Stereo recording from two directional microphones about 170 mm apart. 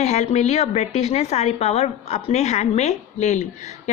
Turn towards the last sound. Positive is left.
turn(degrees=40)  # may be behind; listen again after turning